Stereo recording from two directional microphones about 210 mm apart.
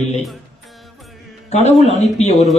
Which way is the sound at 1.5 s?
30° left (ahead or behind).